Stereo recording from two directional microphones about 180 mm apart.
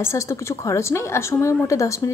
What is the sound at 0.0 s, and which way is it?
A woman's voice, 15° left (ahead or behind).